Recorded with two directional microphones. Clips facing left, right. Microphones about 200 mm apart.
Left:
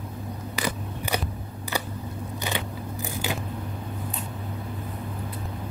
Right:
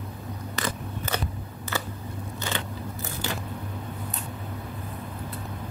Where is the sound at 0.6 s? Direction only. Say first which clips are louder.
Left 2 dB; 15° left (ahead or behind).